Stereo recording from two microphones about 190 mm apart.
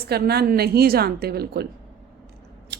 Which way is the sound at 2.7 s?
65° right (ahead or behind).